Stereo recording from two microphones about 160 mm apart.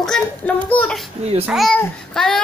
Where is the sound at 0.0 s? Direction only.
5° left (ahead or behind).